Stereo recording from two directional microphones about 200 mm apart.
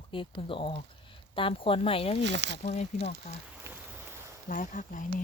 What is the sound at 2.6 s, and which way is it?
Speech, 30° left (ahead or behind).